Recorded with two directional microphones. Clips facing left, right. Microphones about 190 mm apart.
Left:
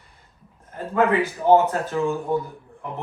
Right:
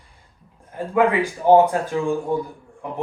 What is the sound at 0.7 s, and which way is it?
Speech, 10° right (ahead or behind).